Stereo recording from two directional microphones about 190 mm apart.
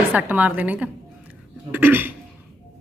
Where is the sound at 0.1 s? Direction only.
10° right (ahead or behind).